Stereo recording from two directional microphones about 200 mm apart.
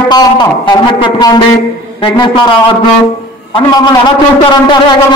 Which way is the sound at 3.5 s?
20° left (ahead or behind).